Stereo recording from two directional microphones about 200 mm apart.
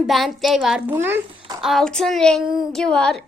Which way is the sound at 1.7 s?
Centre (ahead or behind).